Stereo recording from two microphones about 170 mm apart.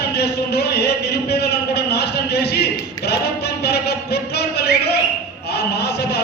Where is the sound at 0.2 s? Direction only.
70° left (ahead or behind).